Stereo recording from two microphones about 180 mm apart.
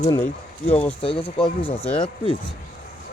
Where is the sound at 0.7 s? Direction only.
5° left (ahead or behind).